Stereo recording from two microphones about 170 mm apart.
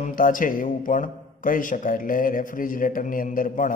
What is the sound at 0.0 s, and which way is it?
A man's voice, 50° left (ahead or behind).